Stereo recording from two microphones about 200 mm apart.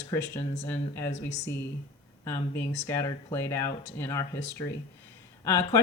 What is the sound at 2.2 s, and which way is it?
Speech, 15° left (ahead or behind).